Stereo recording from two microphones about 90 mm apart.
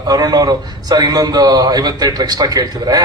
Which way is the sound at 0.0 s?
45° right (ahead or behind).